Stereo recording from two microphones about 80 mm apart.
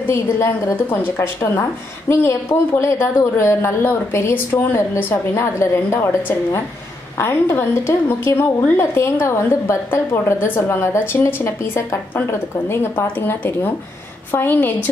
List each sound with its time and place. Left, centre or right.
0.1 s a woman's voice: left